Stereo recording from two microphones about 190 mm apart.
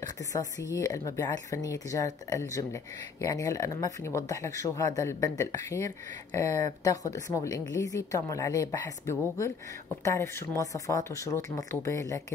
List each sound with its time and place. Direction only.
0.0 s speech: 15° left (ahead or behind)